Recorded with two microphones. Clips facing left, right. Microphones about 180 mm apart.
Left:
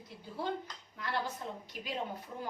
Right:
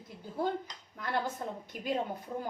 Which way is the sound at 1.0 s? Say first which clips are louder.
Right 3 dB; 50° right (ahead or behind).